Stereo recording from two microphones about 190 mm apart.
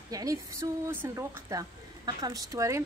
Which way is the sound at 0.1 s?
20° right (ahead or behind).